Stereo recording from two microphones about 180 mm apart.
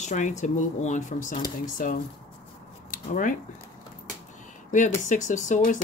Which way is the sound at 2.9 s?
45° left (ahead or behind).